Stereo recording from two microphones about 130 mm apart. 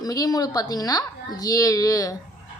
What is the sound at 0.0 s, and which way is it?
A woman's voice, 30° left (ahead or behind).